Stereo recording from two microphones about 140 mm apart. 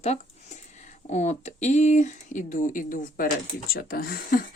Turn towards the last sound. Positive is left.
turn(degrees=90)